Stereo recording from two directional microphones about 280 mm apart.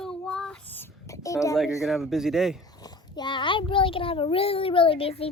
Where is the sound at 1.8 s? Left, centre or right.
Centre.